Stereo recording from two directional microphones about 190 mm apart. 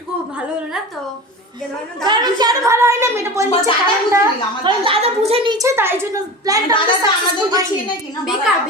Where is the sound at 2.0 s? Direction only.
25° right (ahead or behind).